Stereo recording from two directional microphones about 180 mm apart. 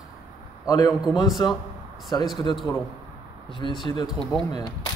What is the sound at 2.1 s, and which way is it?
Speech, 20° left (ahead or behind).